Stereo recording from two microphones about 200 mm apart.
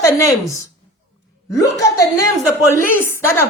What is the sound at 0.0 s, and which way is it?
Speech, 15° left (ahead or behind).